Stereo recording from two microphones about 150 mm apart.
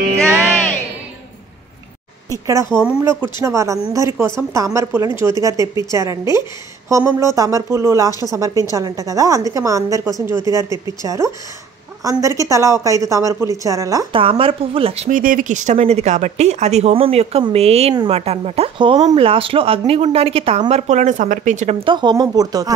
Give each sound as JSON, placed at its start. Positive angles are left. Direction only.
{"t": 2.4, "sound": "a woman's voice", "side_deg": -20}
{"t": 14.1, "sound": "a woman's voice", "side_deg": -40}
{"t": 15.0, "sound": "a woman's voice", "side_deg": -65}